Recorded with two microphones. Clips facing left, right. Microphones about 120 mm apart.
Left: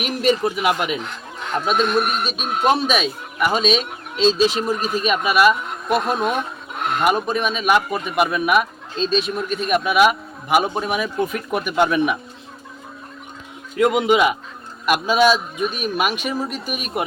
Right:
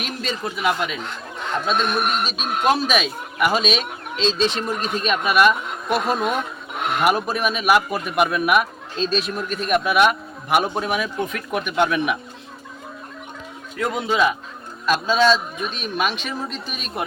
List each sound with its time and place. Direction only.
0.0 s a man's voice: 15° left (ahead or behind)
2.2 s a man's voice: centre (ahead or behind)
13.7 s a man's voice: 15° left (ahead or behind)